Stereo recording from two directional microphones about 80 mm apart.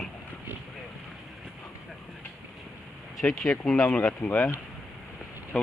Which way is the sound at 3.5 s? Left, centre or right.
Left.